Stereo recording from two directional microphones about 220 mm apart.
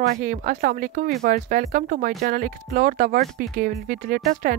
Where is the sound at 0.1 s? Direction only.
40° right (ahead or behind).